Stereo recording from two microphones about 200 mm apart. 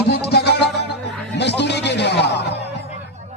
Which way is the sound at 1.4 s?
55° left (ahead or behind).